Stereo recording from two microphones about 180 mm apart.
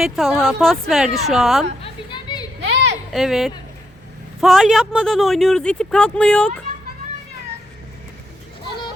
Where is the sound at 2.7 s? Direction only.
65° right (ahead or behind).